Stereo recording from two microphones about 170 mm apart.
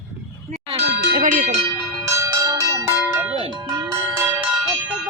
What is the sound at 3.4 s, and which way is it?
Music, 25° right (ahead or behind).